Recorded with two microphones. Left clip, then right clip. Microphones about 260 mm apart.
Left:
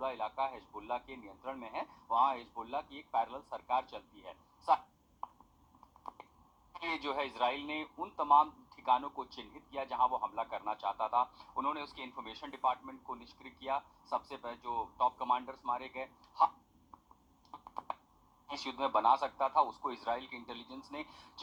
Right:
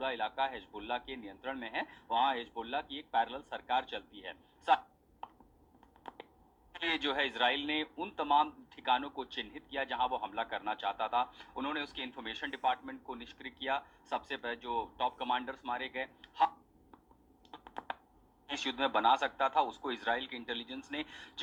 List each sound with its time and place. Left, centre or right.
0.0 s a man's voice: right
6.0 s finger snapping: right
6.7 s a man's voice: right
17.5 s computer keyboard: right
18.4 s a man's voice: right